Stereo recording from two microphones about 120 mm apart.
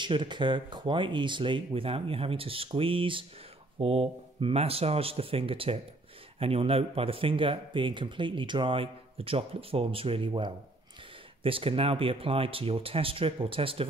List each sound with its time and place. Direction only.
0.0 s speech: 40° right (ahead or behind)